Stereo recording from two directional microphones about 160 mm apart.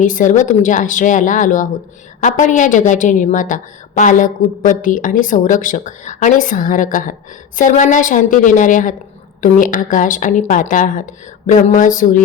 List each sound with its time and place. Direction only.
0.0 s a woman's voice: 55° left (ahead or behind)